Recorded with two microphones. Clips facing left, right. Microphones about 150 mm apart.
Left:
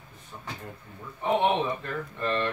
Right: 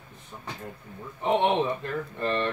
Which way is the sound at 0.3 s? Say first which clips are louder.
Even; 20° right (ahead or behind).